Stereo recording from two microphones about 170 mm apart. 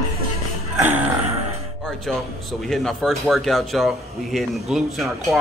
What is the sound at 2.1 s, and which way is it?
Speech, centre (ahead or behind).